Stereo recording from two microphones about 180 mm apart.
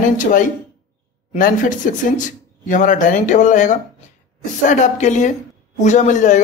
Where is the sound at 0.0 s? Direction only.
45° left (ahead or behind).